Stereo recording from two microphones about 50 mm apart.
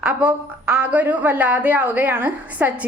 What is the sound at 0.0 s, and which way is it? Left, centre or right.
A woman's voice, right.